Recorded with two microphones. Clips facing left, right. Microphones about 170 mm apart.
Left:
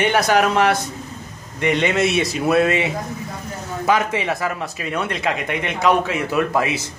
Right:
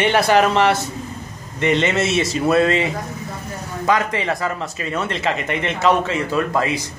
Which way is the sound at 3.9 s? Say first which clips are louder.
Even; 10° left (ahead or behind).